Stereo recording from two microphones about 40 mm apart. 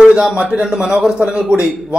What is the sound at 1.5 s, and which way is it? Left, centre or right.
Speech, right.